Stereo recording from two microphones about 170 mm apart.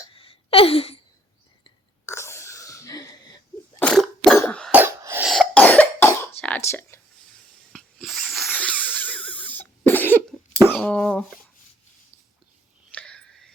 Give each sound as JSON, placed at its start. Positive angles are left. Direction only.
{"t": 0.1, "sound": "a sound", "side_deg": 30}
{"t": 2.0, "sound": "sneeze", "side_deg": 15}
{"t": 3.8, "sound": "cough", "side_deg": 10}
{"t": 4.7, "sound": "cough", "side_deg": -15}
{"t": 5.2, "sound": "cough", "side_deg": 0}
{"t": 6.7, "sound": "a sound", "side_deg": 15}
{"t": 7.7, "sound": "wheeze", "side_deg": 0}
{"t": 10.7, "sound": "cough", "side_deg": 5}
{"t": 12.9, "sound": "whispering", "side_deg": 5}